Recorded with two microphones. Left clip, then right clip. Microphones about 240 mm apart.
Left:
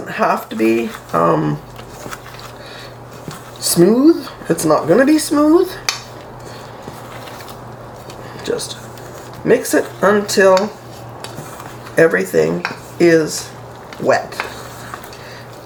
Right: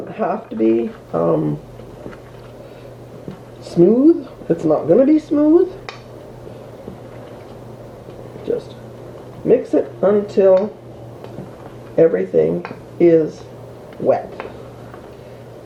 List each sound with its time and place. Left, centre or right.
0.1 s speech: left
3.8 s speech: left
9.5 s speech: left
11.9 s speech: left